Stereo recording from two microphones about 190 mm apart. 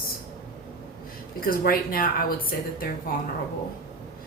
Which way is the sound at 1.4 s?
50° left (ahead or behind).